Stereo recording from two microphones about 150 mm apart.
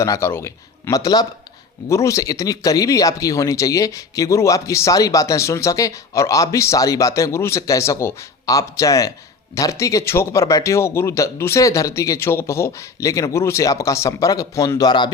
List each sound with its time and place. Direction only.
0.0 s speech: 20° left (ahead or behind)